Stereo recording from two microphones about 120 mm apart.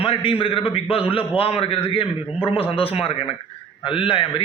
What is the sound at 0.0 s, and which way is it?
A man's voice, 50° left (ahead or behind).